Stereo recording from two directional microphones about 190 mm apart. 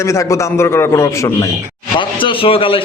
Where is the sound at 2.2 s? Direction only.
30° left (ahead or behind).